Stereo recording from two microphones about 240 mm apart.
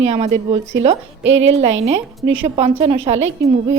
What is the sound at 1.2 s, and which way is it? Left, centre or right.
Speech, right.